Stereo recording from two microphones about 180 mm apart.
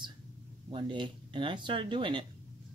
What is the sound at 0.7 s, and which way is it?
Speech, 25° right (ahead or behind).